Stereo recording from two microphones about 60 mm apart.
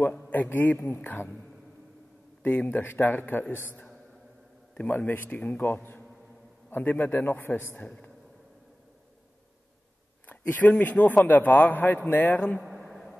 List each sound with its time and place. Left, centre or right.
0.3 s speech: left
2.6 s speech: left
4.9 s speech: left
7.8 s a man's voice: left
10.2 s a sound: left
10.8 s a man's voice: left
12.5 s a sound: centre